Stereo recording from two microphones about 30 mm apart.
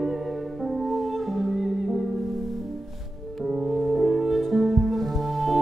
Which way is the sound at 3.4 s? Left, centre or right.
Centre.